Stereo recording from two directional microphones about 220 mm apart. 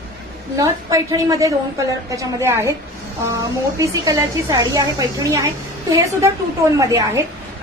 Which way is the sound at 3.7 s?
15° right (ahead or behind).